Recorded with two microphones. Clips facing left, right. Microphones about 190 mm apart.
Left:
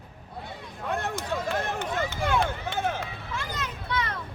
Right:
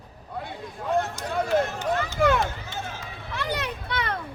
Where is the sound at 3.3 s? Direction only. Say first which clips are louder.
Right 6 dB; 65° right (ahead or behind).